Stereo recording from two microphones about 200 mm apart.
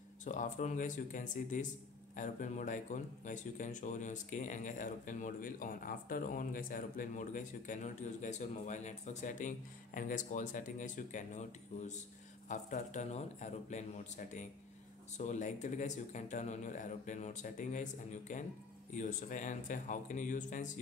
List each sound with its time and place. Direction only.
0.2 s speech: 40° left (ahead or behind)